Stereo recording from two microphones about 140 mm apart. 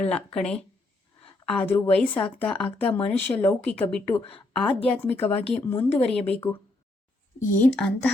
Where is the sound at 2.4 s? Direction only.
10° left (ahead or behind).